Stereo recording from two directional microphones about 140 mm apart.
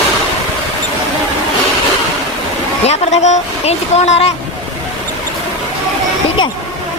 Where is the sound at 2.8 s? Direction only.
50° left (ahead or behind).